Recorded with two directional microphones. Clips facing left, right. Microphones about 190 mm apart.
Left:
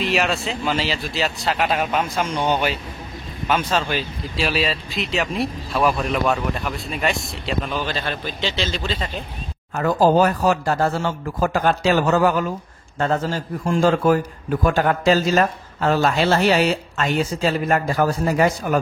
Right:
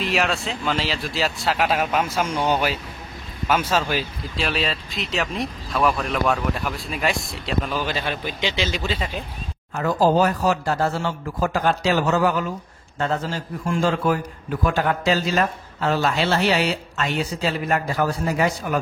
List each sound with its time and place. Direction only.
0.0 s speech: centre (ahead or behind)
9.8 s a man's voice: 55° left (ahead or behind)